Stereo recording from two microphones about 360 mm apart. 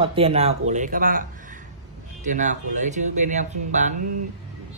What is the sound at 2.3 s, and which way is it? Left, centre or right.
Speech, centre.